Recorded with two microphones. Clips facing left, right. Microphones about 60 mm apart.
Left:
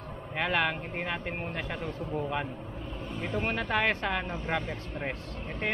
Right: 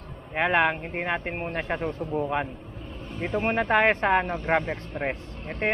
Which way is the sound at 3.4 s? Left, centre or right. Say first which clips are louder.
Right 8 dB; right.